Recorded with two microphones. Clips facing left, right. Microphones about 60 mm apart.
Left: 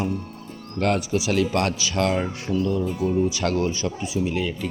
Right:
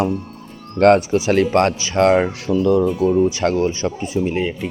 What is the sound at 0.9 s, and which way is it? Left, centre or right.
Speech, right.